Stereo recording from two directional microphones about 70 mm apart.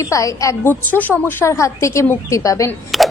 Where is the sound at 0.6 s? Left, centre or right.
Left.